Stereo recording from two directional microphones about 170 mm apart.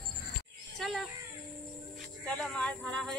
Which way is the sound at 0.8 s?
Centre (ahead or behind).